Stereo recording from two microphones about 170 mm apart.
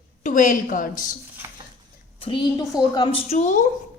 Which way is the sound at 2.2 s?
25° left (ahead or behind).